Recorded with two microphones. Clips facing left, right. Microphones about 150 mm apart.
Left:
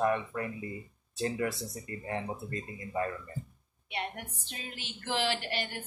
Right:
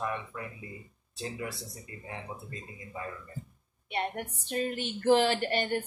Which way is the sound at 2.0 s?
55° left (ahead or behind).